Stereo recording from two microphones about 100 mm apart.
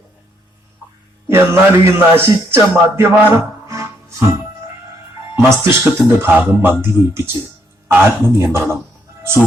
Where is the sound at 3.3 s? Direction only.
35° right (ahead or behind).